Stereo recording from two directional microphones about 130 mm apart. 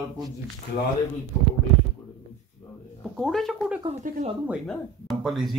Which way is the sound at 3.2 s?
Centre (ahead or behind).